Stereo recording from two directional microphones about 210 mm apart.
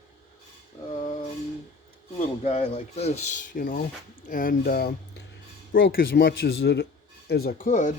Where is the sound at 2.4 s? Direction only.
30° left (ahead or behind).